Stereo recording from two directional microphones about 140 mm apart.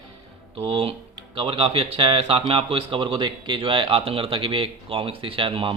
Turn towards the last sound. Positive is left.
turn(degrees=-35)  # may be behind; listen again after turning